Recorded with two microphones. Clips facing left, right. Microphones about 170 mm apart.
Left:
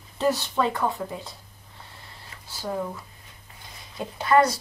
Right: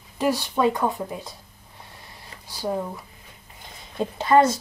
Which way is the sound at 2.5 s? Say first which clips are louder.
Right 4 dB; 15° right (ahead or behind).